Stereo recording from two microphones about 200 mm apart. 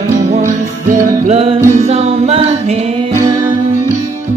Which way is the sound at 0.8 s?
40° right (ahead or behind).